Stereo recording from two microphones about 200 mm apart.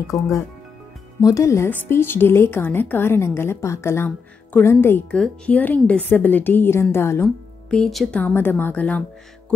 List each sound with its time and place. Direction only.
0.1 s a woman's voice: 15° left (ahead or behind)
7.7 s a woman's voice: centre (ahead or behind)